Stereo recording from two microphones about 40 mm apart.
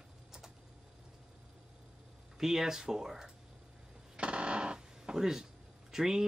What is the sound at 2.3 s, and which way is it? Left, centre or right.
Speech, centre.